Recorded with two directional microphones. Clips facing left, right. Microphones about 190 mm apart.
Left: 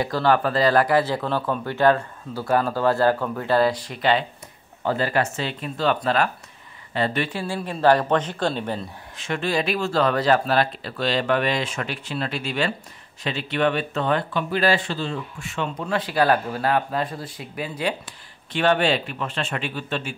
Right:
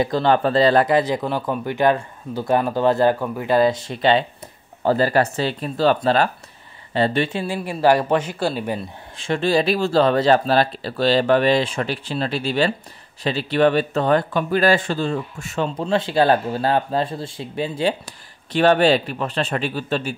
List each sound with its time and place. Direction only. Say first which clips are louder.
0.0 s speech: right 3 dB; 20° right (ahead or behind)
4.8 s speech: right 5 dB; 35° right (ahead or behind); by 8.8 s 10° right (ahead or behind)
9.1 s speech: right 5 dB; 30° right (ahead or behind)